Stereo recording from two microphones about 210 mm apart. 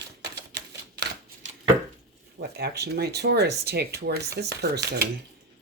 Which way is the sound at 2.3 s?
50° right (ahead or behind).